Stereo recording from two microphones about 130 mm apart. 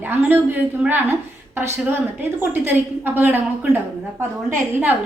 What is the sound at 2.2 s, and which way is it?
A woman's voice, 15° right (ahead or behind).